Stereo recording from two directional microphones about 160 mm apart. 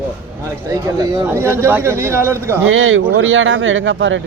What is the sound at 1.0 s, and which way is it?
Speech, 20° right (ahead or behind).